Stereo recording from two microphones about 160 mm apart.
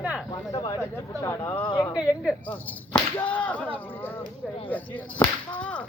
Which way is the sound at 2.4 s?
10° left (ahead or behind).